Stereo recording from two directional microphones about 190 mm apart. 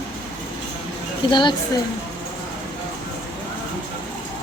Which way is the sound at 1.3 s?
25° left (ahead or behind).